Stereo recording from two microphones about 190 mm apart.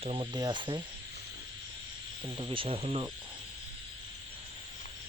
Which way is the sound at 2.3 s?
25° right (ahead or behind).